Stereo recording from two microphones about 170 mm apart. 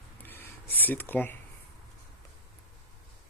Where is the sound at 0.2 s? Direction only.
10° left (ahead or behind).